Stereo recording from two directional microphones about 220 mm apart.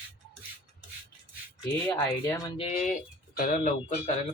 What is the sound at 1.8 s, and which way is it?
Speech, 5° left (ahead or behind).